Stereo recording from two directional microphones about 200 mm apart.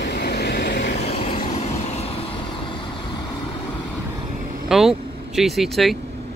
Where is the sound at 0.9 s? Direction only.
35° left (ahead or behind).